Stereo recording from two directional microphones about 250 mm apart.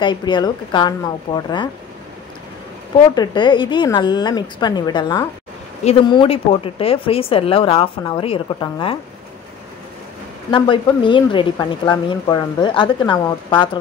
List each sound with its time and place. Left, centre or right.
0.0 s a woman's voice: centre
3.2 s a woman's voice: centre
10.5 s speech: centre